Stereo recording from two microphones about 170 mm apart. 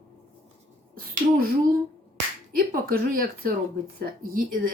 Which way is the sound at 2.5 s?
60° right (ahead or behind).